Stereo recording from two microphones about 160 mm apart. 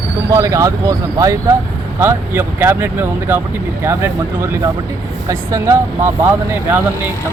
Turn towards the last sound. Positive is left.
turn(degrees=-15)  # may be behind; listen again after turning